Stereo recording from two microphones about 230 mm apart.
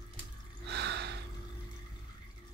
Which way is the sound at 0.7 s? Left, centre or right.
Right.